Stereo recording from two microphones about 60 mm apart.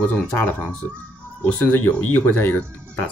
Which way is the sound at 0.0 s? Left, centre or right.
Left.